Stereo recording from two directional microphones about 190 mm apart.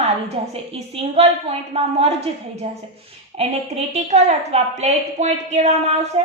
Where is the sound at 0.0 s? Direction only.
30° right (ahead or behind).